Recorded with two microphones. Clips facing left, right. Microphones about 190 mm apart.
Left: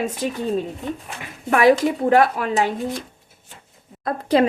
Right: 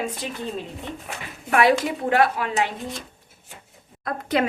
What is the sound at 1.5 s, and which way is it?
A woman's voice, 40° left (ahead or behind).